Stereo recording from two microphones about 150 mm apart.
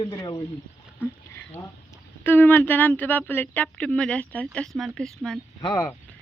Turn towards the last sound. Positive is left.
turn(degrees=25)  # may be behind; listen again after turning